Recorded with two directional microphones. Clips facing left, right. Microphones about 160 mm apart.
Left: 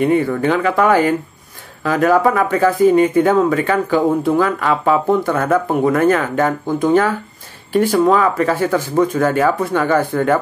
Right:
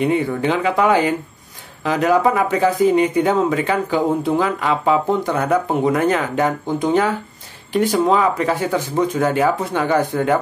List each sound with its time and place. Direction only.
0.0 s speech: 15° right (ahead or behind)